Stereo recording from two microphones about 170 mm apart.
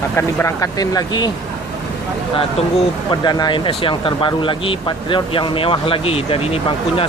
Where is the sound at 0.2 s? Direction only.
15° left (ahead or behind).